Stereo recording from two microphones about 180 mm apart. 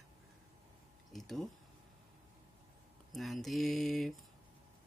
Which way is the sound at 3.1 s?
Centre (ahead or behind).